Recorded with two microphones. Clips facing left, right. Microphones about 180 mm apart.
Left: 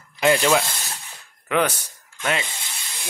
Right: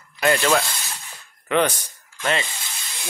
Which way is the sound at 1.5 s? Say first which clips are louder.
Right 1 dB; centre (ahead or behind).